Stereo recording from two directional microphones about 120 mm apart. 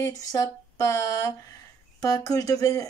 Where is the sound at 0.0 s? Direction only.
30° left (ahead or behind).